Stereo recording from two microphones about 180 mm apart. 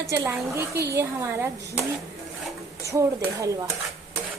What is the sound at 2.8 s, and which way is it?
Speech, 20° right (ahead or behind).